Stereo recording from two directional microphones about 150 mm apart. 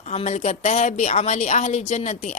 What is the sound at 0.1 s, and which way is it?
A woman's voice, 50° left (ahead or behind).